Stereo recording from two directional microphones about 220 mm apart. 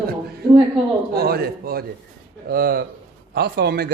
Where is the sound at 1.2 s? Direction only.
45° right (ahead or behind).